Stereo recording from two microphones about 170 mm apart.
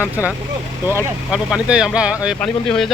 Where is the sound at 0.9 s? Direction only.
10° right (ahead or behind).